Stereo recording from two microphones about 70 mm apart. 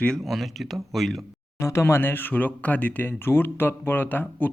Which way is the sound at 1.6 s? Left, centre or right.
Left.